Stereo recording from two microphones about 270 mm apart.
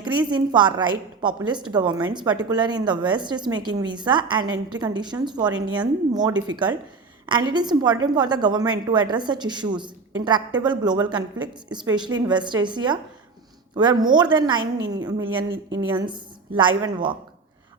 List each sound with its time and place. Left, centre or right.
0.0 s a woman's voice: centre